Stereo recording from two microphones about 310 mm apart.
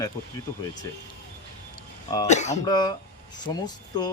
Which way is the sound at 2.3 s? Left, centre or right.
Left.